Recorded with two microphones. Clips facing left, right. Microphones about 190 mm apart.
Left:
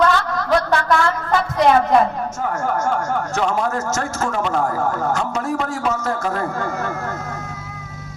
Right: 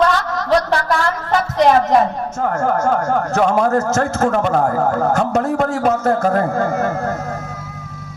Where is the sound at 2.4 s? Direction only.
55° right (ahead or behind).